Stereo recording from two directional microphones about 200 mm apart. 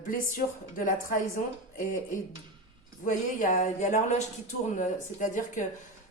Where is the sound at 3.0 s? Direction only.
40° left (ahead or behind).